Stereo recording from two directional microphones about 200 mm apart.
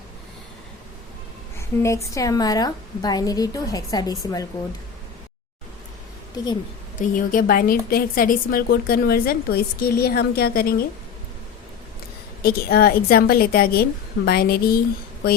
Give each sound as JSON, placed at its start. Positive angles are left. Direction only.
{"t": 1.5, "sound": "a woman's voice", "side_deg": 15}
{"t": 6.3, "sound": "speech", "side_deg": 20}
{"t": 7.0, "sound": "a woman's voice", "side_deg": 40}
{"t": 12.4, "sound": "a woman's voice", "side_deg": 50}